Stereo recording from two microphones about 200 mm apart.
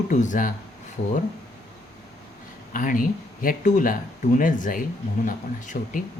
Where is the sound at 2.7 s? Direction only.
40° left (ahead or behind).